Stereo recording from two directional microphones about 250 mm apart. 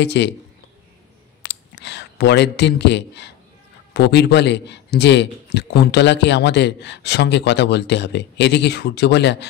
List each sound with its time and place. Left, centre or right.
0.0 s a man's voice: left
1.4 s a sound: left
3.9 s a man's voice: left